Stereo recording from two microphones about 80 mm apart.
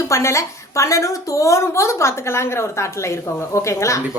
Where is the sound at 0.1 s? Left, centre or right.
Left.